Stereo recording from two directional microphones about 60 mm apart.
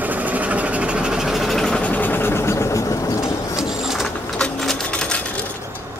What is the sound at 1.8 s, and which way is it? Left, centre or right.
Vehicle, left.